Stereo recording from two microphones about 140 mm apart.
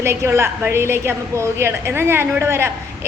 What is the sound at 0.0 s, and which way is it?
A woman's voice, 20° right (ahead or behind).